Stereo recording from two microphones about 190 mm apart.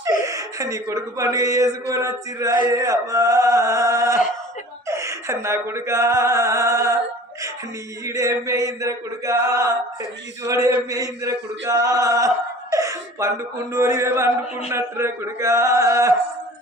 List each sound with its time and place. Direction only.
0.3 s mantra: 15° right (ahead or behind)
4.9 s a sound: 15° right (ahead or behind)
8.0 s mantra: 15° right (ahead or behind)
12.7 s laughter: 15° right (ahead or behind)
13.7 s mantra: 15° right (ahead or behind)